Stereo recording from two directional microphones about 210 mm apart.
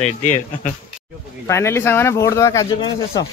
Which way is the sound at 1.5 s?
10° left (ahead or behind).